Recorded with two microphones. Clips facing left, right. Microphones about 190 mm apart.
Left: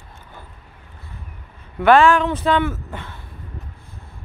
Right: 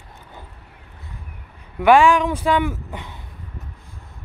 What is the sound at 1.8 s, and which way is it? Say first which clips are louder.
Speech: even; 15° right (ahead or behind).